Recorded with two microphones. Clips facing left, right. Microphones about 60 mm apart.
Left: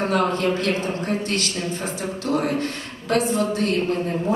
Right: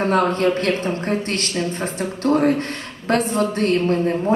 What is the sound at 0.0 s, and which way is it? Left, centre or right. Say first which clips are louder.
A woman's voice: right 3 dB; right.